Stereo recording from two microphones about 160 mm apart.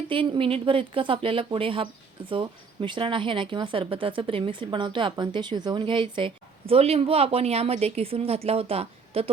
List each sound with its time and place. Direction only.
0.1 s speech: 35° right (ahead or behind)